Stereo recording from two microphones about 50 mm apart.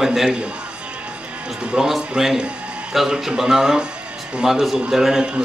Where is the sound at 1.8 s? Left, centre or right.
Centre.